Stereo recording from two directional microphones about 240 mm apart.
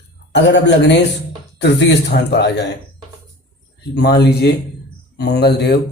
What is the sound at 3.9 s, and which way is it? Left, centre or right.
Speech, left.